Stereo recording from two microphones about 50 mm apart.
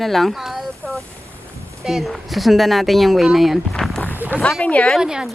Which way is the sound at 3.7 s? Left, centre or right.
Centre.